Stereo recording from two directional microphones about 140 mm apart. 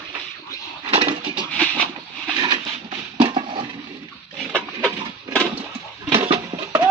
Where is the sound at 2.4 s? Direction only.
35° right (ahead or behind).